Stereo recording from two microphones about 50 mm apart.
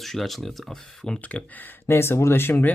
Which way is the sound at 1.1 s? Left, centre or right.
Left.